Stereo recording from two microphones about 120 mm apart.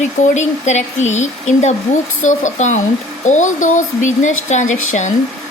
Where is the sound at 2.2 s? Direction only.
90° left.